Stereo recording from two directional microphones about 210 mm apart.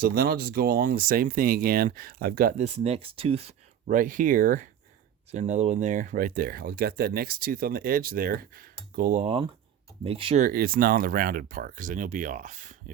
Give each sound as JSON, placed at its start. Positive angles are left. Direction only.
{"t": 0.0, "sound": "speech", "side_deg": -45}
{"t": 10.4, "sound": "speech", "side_deg": -45}